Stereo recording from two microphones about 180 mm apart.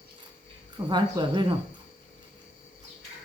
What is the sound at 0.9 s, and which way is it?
Speech, 25° right (ahead or behind).